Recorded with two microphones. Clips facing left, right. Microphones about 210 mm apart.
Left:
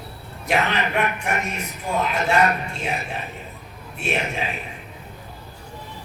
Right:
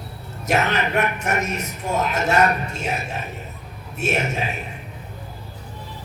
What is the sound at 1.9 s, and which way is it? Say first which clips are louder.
Speech: right 1 dB; 40° right (ahead or behind).